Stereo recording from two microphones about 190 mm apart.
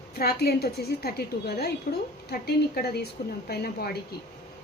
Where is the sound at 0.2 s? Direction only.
55° left (ahead or behind).